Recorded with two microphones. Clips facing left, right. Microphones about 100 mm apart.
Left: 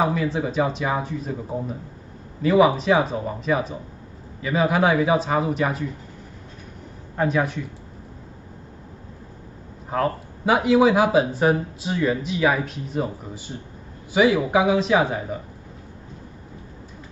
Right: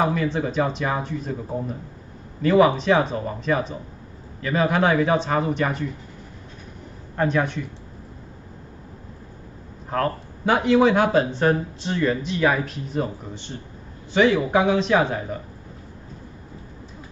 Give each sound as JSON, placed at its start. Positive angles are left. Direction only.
{"t": 0.0, "sound": "speech", "side_deg": 5}
{"t": 7.2, "sound": "speech", "side_deg": 5}
{"t": 9.8, "sound": "speech", "side_deg": 5}